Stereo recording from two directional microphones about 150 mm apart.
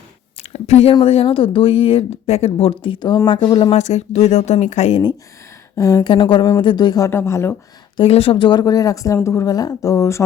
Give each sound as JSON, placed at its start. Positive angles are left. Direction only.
{"t": 0.4, "sound": "a sound", "side_deg": 45}
{"t": 1.0, "sound": "speech", "side_deg": 40}
{"t": 3.7, "sound": "speech", "side_deg": 50}
{"t": 5.7, "sound": "speech", "side_deg": 25}
{"t": 7.9, "sound": "speech", "side_deg": 40}